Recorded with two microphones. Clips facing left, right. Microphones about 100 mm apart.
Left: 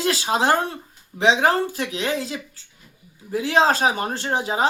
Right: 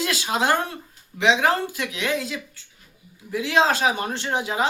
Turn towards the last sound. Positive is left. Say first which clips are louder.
# left 2 dB
turn(degrees=35)  # may be behind; listen again after turning